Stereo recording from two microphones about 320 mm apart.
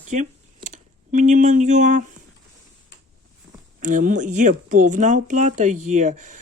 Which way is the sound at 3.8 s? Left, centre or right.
Right.